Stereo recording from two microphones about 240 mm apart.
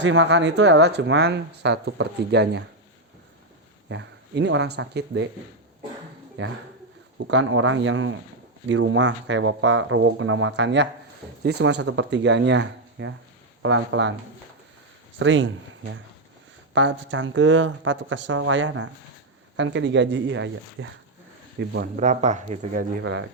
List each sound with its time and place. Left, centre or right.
0.0 s speech: right
3.8 s speech: right
6.4 s speech: right
15.2 s speech: right
16.7 s speech: right
22.0 s speech: right